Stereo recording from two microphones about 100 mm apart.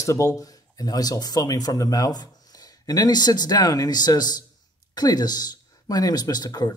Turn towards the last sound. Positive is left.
turn(degrees=40)  # may be behind; listen again after turning